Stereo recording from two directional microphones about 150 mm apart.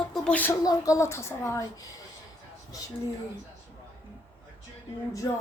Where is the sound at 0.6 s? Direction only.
25° left (ahead or behind).